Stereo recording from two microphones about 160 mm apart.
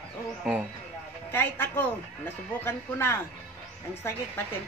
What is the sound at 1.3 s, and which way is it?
Speech, 15° left (ahead or behind).